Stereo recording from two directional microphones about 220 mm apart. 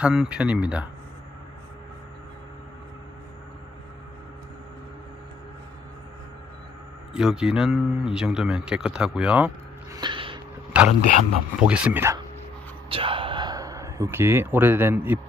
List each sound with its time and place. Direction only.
0.0 s a man's voice: 5° right (ahead or behind)
7.1 s a man's voice: 5° right (ahead or behind)
9.9 s a sound: 20° right (ahead or behind)
10.7 s speech: 5° right (ahead or behind)
12.9 s speech: 25° right (ahead or behind)